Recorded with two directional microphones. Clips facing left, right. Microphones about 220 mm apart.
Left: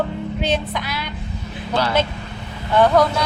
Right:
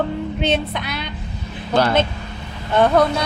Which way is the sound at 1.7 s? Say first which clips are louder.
Right 3 dB; 50° right (ahead or behind).